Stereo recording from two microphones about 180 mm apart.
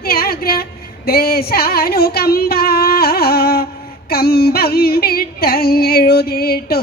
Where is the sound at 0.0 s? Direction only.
55° left (ahead or behind).